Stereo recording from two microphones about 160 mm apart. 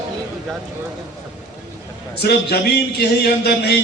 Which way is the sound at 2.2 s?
90° left.